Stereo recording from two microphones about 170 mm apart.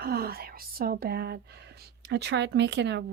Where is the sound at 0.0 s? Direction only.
65° right (ahead or behind).